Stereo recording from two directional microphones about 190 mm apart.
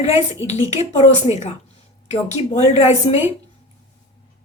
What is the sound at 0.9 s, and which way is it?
A woman's voice, 35° left (ahead or behind).